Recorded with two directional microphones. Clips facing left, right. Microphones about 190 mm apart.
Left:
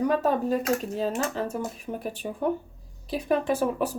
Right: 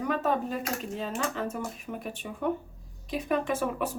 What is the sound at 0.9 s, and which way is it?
Speech, 40° left (ahead or behind).